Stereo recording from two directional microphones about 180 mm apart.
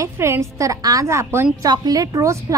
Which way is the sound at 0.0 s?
15° right (ahead or behind).